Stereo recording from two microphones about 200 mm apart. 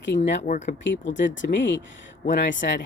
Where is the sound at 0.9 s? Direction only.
65° left (ahead or behind).